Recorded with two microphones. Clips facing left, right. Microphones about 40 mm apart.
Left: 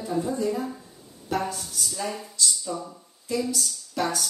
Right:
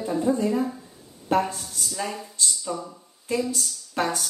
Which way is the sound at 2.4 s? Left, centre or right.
Right.